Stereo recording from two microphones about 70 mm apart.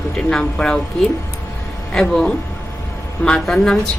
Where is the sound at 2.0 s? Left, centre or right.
Centre.